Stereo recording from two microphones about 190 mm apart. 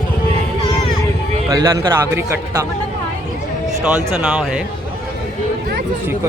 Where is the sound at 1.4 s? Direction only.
20° right (ahead or behind).